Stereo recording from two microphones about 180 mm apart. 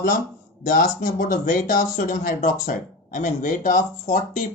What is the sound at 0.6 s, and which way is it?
Speech, 50° left (ahead or behind).